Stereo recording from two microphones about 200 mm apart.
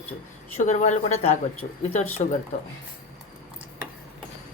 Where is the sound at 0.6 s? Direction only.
40° left (ahead or behind).